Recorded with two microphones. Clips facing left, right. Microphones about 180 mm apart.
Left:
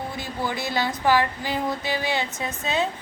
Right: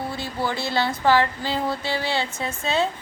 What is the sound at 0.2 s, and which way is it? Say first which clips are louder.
Speech: even; 20° left (ahead or behind).